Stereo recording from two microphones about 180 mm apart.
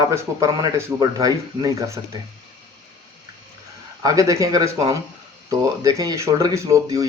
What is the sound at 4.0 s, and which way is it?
A man's voice, 20° right (ahead or behind).